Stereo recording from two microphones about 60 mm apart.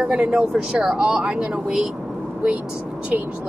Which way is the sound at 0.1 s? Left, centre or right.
Centre.